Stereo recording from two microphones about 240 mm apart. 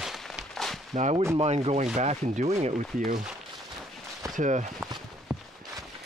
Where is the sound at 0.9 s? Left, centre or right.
Right.